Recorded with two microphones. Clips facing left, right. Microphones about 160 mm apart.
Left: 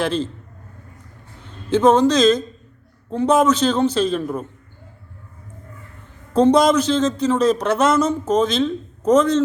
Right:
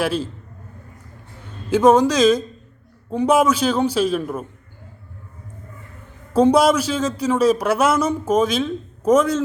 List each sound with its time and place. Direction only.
0.0 s speech: 10° right (ahead or behind)
1.7 s speech: 10° right (ahead or behind)
6.3 s speech: 10° right (ahead or behind)